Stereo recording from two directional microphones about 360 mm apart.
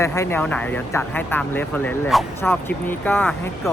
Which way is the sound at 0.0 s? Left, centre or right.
Centre.